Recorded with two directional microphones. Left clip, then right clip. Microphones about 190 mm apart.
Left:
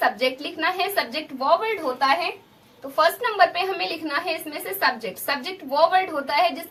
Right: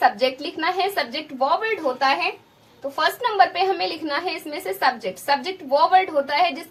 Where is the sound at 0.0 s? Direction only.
25° left (ahead or behind).